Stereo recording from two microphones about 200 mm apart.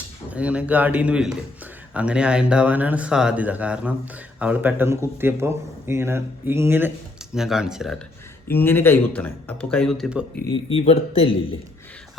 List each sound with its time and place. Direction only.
0.3 s speech: 5° right (ahead or behind)
8.4 s speech: 10° left (ahead or behind)
10.5 s speech: 30° left (ahead or behind)